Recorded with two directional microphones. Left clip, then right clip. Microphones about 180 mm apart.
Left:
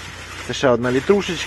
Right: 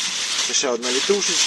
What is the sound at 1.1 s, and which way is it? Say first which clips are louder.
Speech: left 4 dB; 35° left (ahead or behind).